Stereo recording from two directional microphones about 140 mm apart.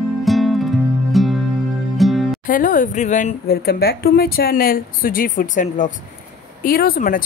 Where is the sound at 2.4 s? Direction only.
80° left.